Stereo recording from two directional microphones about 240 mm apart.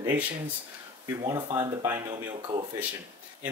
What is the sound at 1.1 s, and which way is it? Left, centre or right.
Speech, centre.